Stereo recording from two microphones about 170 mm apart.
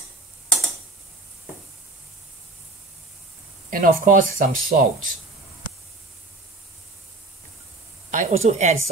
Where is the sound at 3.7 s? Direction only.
55° right (ahead or behind).